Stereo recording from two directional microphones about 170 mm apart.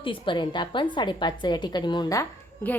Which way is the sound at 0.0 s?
30° left (ahead or behind).